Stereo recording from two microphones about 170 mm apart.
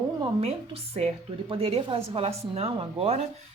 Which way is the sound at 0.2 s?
35° right (ahead or behind).